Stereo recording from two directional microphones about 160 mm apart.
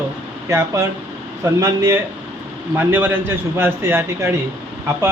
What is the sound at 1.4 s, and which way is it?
Speech, 20° right (ahead or behind).